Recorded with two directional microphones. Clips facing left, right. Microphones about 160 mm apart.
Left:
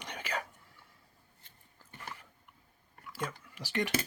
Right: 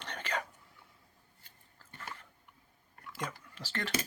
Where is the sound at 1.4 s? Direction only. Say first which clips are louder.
Even; 15° left (ahead or behind).